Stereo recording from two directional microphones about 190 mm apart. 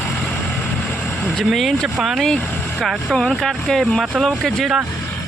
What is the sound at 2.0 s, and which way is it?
Speech, centre (ahead or behind).